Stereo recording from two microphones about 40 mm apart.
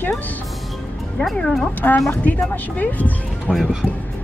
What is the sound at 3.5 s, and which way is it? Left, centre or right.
Speech, left.